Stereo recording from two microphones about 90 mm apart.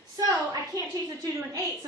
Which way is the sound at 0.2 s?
45° right (ahead or behind).